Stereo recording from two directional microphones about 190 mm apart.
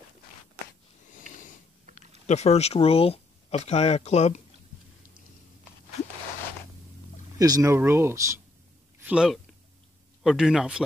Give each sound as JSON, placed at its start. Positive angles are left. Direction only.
{"t": 1.3, "sound": "a sound", "side_deg": 45}
{"t": 2.0, "sound": "speech", "side_deg": 35}
{"t": 7.3, "sound": "speech", "side_deg": -20}